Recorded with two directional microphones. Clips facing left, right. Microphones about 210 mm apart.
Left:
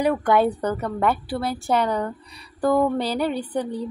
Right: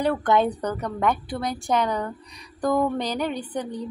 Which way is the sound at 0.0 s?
10° left (ahead or behind).